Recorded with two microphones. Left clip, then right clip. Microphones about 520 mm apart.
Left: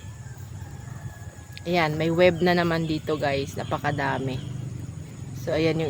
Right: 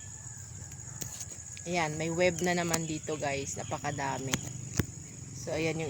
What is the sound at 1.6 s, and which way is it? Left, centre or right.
Speech, right.